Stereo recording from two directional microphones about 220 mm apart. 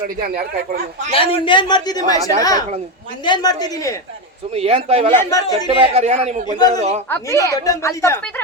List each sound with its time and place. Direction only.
0.2 s speech: 40° right (ahead or behind)
1.1 s a man's voice: 25° left (ahead or behind)
4.5 s speech: 25° right (ahead or behind)
5.1 s speech: 15° left (ahead or behind)
5.8 s speech: 30° right (ahead or behind)
7.1 s speech: 15° left (ahead or behind)